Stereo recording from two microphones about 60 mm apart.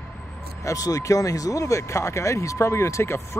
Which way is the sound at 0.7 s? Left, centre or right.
Left.